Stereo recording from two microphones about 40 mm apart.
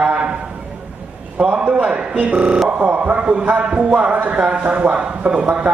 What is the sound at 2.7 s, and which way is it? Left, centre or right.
A man's voice, right.